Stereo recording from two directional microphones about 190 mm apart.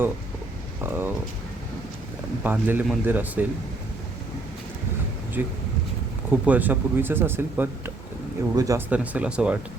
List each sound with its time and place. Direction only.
0.9 s speech: 10° right (ahead or behind)
2.4 s speech: 10° right (ahead or behind)
5.4 s speech: 10° right (ahead or behind)
8.9 s speech: 5° right (ahead or behind)